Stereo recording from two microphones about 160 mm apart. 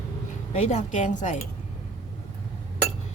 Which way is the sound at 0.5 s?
45° left (ahead or behind).